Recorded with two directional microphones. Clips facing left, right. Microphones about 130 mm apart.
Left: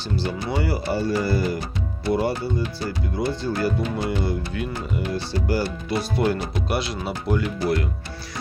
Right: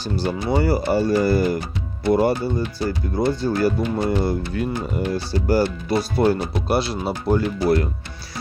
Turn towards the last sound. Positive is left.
turn(degrees=-35)  # may be behind; listen again after turning